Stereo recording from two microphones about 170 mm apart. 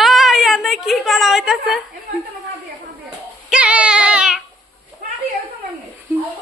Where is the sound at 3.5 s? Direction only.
5° right (ahead or behind).